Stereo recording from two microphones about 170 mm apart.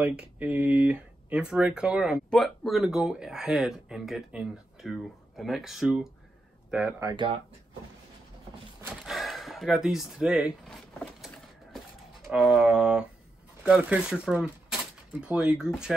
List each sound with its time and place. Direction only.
0.0 s speech: 10° right (ahead or behind)
7.0 s speech: 25° right (ahead or behind)
9.0 s speech: centre (ahead or behind)
11.1 s a sound: centre (ahead or behind)
12.3 s speech: 5° right (ahead or behind)